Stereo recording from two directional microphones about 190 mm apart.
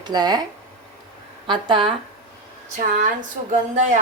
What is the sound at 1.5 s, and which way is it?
Speech, 25° right (ahead or behind).